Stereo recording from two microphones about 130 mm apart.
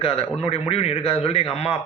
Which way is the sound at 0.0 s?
45° left (ahead or behind).